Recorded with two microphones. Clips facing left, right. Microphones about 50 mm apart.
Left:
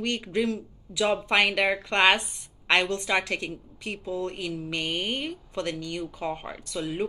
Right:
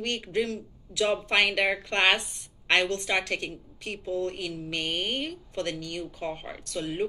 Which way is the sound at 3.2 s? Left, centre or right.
Left.